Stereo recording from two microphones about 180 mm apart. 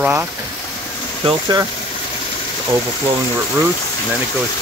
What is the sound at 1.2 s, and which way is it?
Speech, 25° right (ahead or behind).